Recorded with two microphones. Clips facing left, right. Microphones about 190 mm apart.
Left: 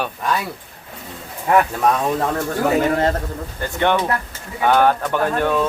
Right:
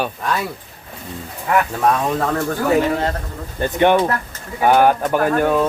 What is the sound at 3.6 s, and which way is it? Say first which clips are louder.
Speech: right 4 dB; 15° right (ahead or behind).